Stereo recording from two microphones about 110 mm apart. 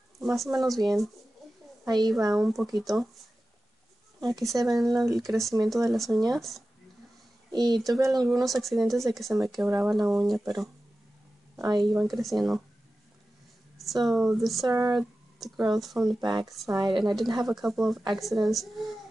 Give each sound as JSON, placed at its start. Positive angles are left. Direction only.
{"t": 0.2, "sound": "a woman's voice", "side_deg": 0}
{"t": 1.9, "sound": "speech", "side_deg": -40}
{"t": 2.3, "sound": "speech", "side_deg": 0}
{"t": 4.3, "sound": "speech", "side_deg": 0}
{"t": 7.5, "sound": "speech", "side_deg": -35}
{"t": 7.9, "sound": "speech", "side_deg": 0}
{"t": 11.7, "sound": "speech", "side_deg": 0}
{"t": 14.0, "sound": "speech", "side_deg": 0}
{"t": 14.7, "sound": "speech", "side_deg": -35}
{"t": 15.0, "sound": "speech", "side_deg": 0}
{"t": 16.2, "sound": "speech", "side_deg": -40}
{"t": 17.0, "sound": "speech", "side_deg": 0}